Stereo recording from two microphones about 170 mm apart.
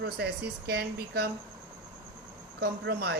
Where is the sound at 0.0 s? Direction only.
75° right (ahead or behind).